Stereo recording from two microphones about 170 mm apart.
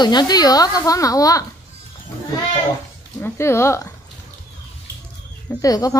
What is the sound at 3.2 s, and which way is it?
Speech, 15° left (ahead or behind).